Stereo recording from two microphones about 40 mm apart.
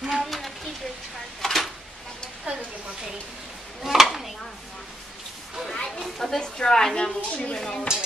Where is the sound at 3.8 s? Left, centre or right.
Centre.